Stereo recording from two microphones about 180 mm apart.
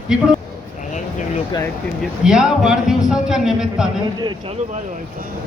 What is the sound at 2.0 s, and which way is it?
A man's voice, 5° right (ahead or behind).